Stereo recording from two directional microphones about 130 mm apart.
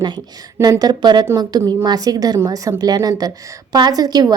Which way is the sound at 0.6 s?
30° right (ahead or behind).